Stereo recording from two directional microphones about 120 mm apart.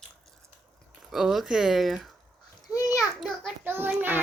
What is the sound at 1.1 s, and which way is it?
Speech, 5° right (ahead or behind).